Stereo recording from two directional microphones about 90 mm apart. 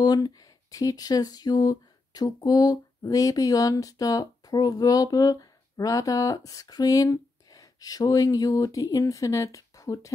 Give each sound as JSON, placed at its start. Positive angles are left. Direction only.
{"t": 0.0, "sound": "speech", "side_deg": 45}